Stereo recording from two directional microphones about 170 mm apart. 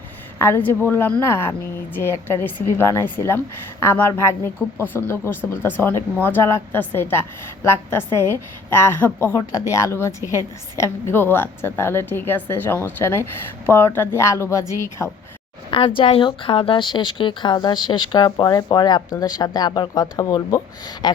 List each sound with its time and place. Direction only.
0.3 s a woman's voice: 15° left (ahead or behind)
16.0 s a woman's voice: 30° left (ahead or behind)